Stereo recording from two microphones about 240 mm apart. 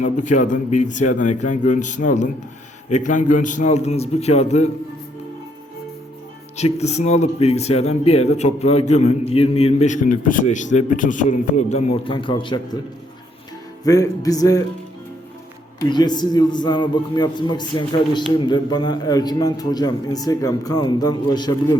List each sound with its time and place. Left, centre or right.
0.0 s a man's voice: left
6.6 s a man's voice: left
13.8 s a man's voice: centre
15.9 s a man's voice: centre